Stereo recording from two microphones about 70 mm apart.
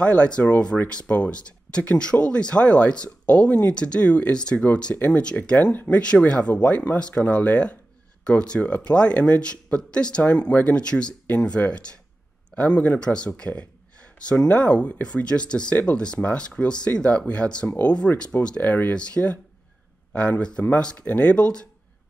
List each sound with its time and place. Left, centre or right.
0.0 s speech: centre
18.6 s speech: left
18.9 s speech: centre